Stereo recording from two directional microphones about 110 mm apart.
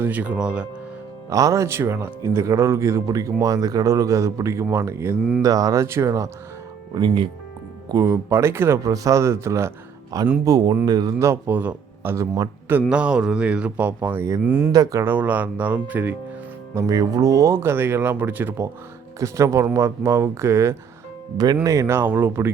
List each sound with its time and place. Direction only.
0.0 s speech: 15° right (ahead or behind)
1.3 s speech: 30° right (ahead or behind)
6.9 s speech: 45° right (ahead or behind)
8.0 s speech: 25° right (ahead or behind)
11.2 s speech: 20° right (ahead or behind)
12.1 s speech: 30° right (ahead or behind)
12.9 s speech: 10° right (ahead or behind)
14.7 s speech: 35° right (ahead or behind)
15.0 s speech: 15° right (ahead or behind)
16.7 s speech: 30° right (ahead or behind)
21.3 s speech: 35° right (ahead or behind); by 22.5 s 20° right (ahead or behind)